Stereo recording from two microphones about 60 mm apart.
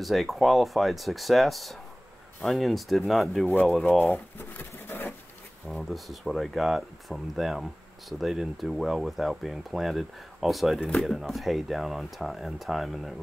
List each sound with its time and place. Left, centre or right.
0.0 s speech: centre
4.0 s a sound: left
5.7 s speech: centre